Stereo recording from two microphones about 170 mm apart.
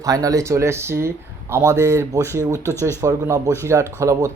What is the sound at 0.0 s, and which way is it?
Speech, 20° right (ahead or behind).